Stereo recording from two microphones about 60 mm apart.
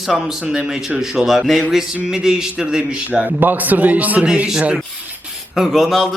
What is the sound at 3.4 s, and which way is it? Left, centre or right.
Speech, right.